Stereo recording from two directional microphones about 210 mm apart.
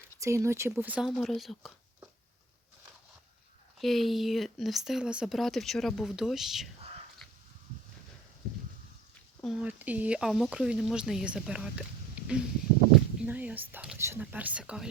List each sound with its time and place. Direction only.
0.2 s speech: 15° right (ahead or behind)
3.8 s speech: centre (ahead or behind)
9.4 s speech: 5° right (ahead or behind)